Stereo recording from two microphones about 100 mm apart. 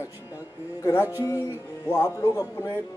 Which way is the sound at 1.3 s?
25° left (ahead or behind).